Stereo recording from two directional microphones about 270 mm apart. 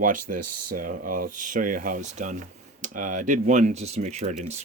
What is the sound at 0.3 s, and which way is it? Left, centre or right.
Speech, right.